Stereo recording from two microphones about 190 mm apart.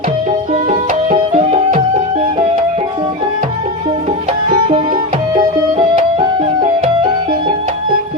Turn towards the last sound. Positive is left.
turn(degrees=-25)  # may be behind; listen again after turning